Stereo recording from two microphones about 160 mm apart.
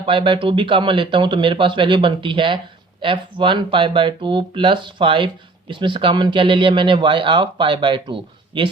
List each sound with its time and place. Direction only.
0.0 s speech: 35° right (ahead or behind)